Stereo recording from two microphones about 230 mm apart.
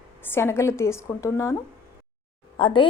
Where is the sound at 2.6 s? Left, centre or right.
Left.